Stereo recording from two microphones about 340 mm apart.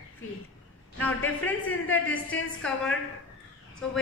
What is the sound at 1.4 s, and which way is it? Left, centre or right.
A woman's voice, centre.